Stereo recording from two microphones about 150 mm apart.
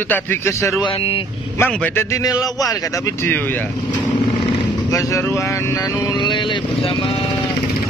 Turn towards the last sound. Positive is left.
turn(degrees=35)  # may be behind; listen again after turning